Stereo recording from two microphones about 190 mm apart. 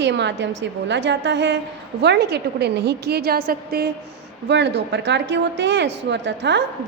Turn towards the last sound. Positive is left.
turn(degrees=-65)  # may be behind; listen again after turning